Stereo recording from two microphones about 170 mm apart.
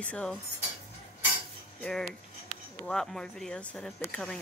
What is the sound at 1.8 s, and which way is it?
Speech, 5° left (ahead or behind).